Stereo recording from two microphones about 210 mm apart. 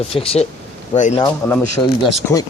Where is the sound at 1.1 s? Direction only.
15° left (ahead or behind).